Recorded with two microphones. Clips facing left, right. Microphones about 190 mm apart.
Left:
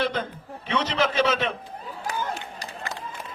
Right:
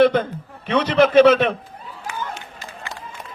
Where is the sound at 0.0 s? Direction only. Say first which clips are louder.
Right 11 dB; 60° right (ahead or behind).